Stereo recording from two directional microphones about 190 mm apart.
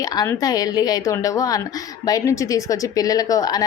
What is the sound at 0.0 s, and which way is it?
Speech, 20° left (ahead or behind).